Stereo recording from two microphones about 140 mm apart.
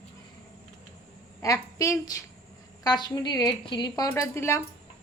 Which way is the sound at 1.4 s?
25° left (ahead or behind).